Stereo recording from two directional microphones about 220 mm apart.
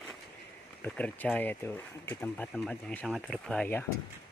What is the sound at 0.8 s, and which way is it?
Speech, 5° left (ahead or behind).